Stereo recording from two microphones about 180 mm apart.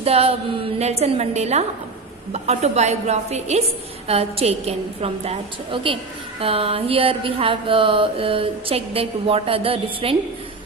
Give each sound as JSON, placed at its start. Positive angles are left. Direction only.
{"t": 0.0, "sound": "mantra", "side_deg": -35}